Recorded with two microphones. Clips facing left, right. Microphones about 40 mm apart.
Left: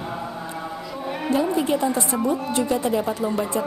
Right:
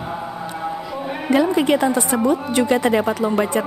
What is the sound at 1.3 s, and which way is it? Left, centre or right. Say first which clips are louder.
A woman's voice: right 5 dB; right.